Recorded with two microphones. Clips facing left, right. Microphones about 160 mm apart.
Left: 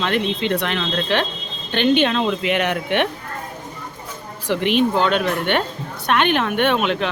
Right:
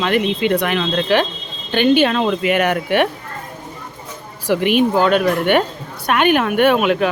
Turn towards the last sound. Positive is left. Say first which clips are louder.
# right 5 dB
turn(degrees=-5)  # may be behind; listen again after turning